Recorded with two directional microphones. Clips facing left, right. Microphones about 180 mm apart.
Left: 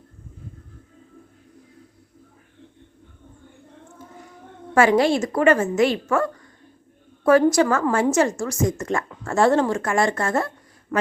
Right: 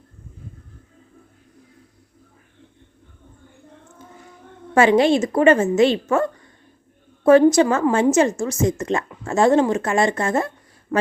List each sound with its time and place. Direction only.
4.7 s a woman's voice: 25° right (ahead or behind)